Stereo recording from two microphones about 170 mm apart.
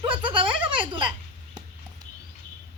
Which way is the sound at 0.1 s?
30° right (ahead or behind).